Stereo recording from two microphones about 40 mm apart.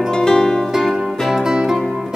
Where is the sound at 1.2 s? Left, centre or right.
Centre.